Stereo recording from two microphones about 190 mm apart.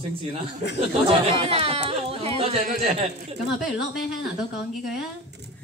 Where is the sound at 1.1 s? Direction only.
30° right (ahead or behind).